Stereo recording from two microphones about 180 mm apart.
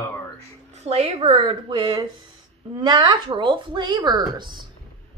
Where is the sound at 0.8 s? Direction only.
35° right (ahead or behind).